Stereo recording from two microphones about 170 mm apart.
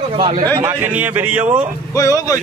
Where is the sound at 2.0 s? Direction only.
20° left (ahead or behind).